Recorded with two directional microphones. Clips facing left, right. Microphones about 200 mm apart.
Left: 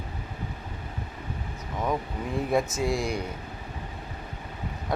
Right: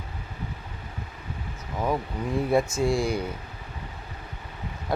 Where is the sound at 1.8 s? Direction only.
Centre (ahead or behind).